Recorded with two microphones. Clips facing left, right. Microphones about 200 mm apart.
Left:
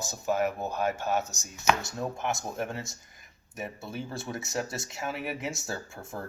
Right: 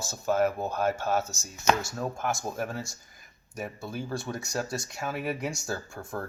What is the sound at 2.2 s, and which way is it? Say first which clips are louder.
Speech: right 1 dB; centre (ahead or behind).